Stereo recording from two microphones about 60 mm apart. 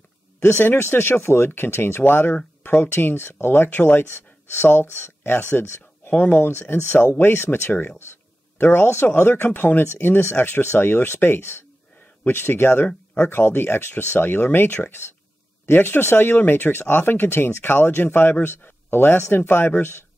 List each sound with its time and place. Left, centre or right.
0.4 s speech: left